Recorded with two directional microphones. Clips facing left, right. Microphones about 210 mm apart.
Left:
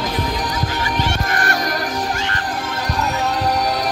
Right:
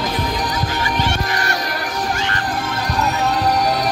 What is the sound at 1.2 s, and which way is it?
Music, 50° left (ahead or behind).